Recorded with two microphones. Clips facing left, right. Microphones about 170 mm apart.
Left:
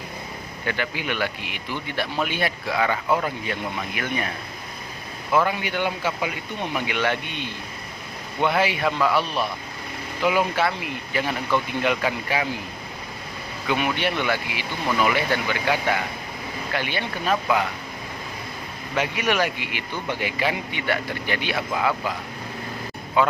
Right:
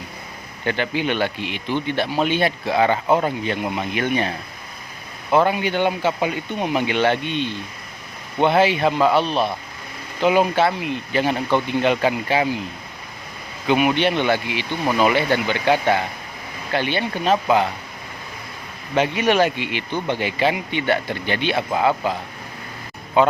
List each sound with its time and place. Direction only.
0.6 s speech: 25° right (ahead or behind)
13.7 s speech: 20° right (ahead or behind)
18.9 s speech: 25° right (ahead or behind)
23.2 s speech: 25° right (ahead or behind)